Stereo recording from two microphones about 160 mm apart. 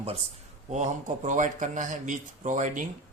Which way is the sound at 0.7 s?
50° right (ahead or behind).